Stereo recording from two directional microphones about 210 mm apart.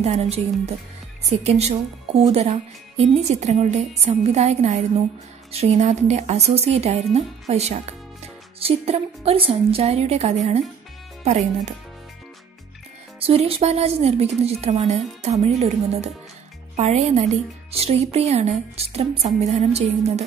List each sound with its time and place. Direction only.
0.0 s speech: 30° right (ahead or behind)
13.2 s a woman's voice: 30° right (ahead or behind)